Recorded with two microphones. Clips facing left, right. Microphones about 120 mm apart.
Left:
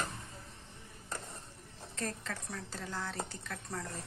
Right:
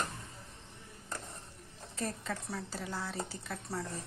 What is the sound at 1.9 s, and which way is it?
Speech, 10° right (ahead or behind).